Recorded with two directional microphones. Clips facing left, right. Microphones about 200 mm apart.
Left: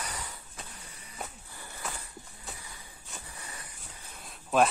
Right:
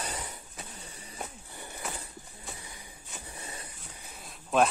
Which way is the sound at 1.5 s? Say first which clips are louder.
Right 2 dB; 20° right (ahead or behind).